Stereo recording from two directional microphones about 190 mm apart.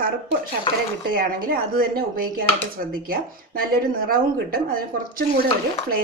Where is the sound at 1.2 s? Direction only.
50° right (ahead or behind).